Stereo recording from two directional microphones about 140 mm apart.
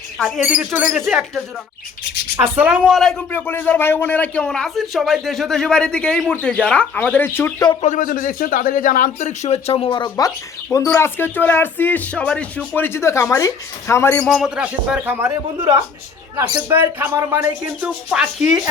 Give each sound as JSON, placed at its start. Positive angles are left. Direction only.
{"t": 0.2, "sound": "speech", "side_deg": -5}
{"t": 2.6, "sound": "a man's voice", "side_deg": -10}
{"t": 3.3, "sound": "a man's voice", "side_deg": 15}
{"t": 7.8, "sound": "a man's voice", "side_deg": 65}
{"t": 14.3, "sound": "speech", "side_deg": -5}
{"t": 16.6, "sound": "speech", "side_deg": -15}
{"t": 17.7, "sound": "a man's voice", "side_deg": -5}